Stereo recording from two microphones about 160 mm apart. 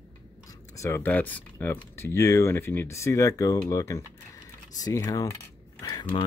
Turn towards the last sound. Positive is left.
turn(degrees=25)  # may be behind; listen again after turning